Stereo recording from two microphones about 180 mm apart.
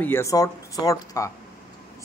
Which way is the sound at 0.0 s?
15° left (ahead or behind).